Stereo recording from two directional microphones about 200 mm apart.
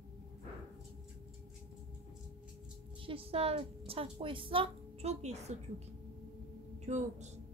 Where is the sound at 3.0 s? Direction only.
30° right (ahead or behind).